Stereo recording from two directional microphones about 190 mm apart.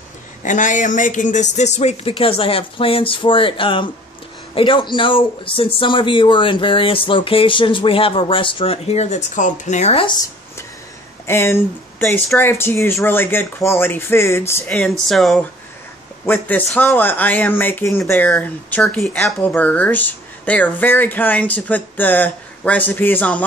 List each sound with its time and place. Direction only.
0.4 s speech: 40° left (ahead or behind)
11.2 s speech: 15° left (ahead or behind)
12.0 s speech: centre (ahead or behind)
14.7 s speech: centre (ahead or behind)